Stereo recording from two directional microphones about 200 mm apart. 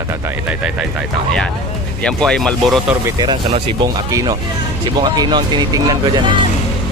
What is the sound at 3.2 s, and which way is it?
Speech, 20° right (ahead or behind).